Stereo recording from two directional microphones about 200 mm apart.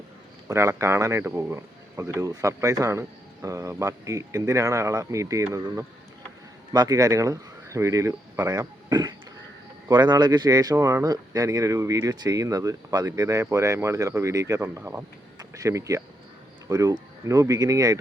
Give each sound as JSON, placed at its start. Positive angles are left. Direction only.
{"t": 0.4, "sound": "speech", "side_deg": -15}